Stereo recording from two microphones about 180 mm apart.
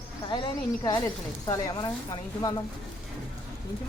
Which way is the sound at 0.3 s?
25° left (ahead or behind).